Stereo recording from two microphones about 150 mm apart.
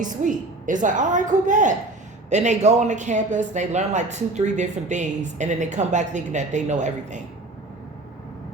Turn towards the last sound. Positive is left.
turn(degrees=-55)  # may be behind; listen again after turning